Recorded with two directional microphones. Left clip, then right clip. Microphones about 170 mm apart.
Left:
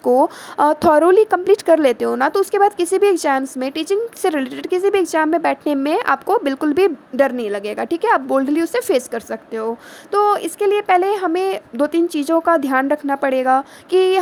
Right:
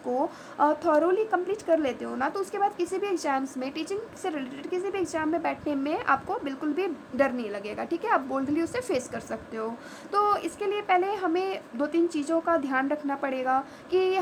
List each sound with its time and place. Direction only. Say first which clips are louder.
0.0 s a woman's voice: left 14 dB; 50° left (ahead or behind)